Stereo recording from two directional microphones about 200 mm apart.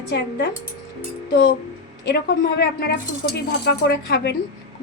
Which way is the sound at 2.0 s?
60° left (ahead or behind).